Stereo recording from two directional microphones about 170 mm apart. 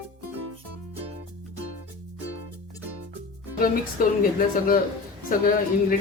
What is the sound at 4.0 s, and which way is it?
Speech, 55° left (ahead or behind).